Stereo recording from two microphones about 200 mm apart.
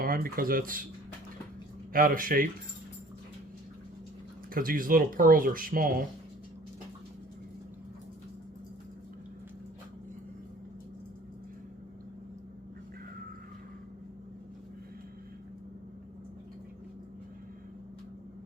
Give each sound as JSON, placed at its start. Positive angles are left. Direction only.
{"t": 0.0, "sound": "speech", "side_deg": -45}
{"t": 1.9, "sound": "speech", "side_deg": -45}
{"t": 4.5, "sound": "speech", "side_deg": -45}